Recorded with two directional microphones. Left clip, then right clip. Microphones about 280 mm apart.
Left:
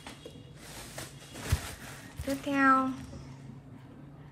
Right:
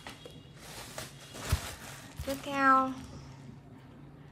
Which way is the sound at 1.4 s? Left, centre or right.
Centre.